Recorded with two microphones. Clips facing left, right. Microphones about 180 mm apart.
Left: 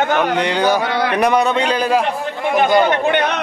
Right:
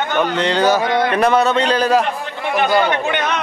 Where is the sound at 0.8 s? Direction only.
20° right (ahead or behind).